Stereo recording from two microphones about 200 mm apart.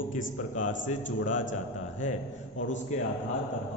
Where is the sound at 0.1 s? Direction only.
40° left (ahead or behind).